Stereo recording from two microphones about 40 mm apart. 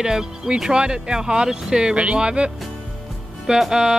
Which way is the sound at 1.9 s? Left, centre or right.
Right.